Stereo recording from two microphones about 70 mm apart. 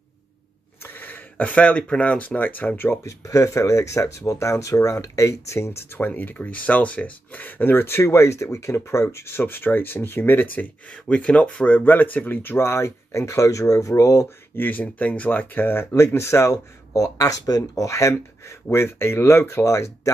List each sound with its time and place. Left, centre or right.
0.8 s speech: left
3.0 s speech: left
5.9 s speech: left
14.6 s speech: left